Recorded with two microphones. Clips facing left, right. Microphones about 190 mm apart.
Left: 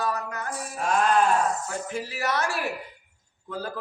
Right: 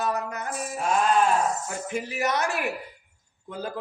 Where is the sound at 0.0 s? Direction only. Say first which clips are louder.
Right 1 dB; 20° right (ahead or behind).